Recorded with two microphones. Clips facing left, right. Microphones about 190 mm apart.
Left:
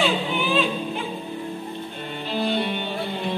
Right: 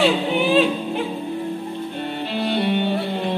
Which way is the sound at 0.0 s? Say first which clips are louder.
Right 5 dB; 70° right (ahead or behind).